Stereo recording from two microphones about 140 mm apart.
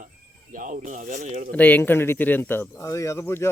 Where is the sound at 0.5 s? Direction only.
70° right (ahead or behind).